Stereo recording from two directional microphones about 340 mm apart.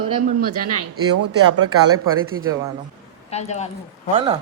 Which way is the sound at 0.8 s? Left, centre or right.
Right.